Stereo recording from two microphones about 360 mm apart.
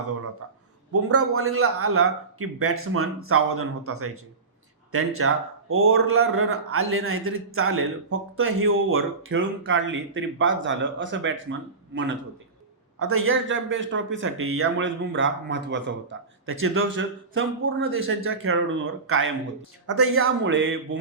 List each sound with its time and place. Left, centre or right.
1.0 s speech: right
13.0 s speech: right